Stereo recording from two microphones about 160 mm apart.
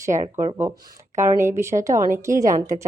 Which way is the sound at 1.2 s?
15° right (ahead or behind).